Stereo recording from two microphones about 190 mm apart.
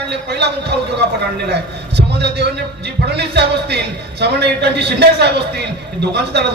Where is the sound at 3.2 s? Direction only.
60° right (ahead or behind).